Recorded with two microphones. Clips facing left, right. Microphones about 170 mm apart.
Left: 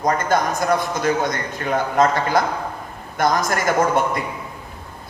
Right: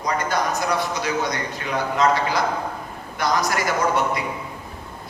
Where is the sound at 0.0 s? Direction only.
50° left (ahead or behind).